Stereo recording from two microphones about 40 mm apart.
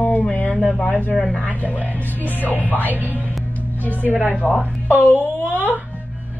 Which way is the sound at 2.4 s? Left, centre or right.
Left.